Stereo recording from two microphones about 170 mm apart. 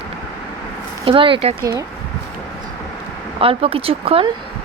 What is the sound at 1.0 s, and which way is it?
Speech, 30° right (ahead or behind).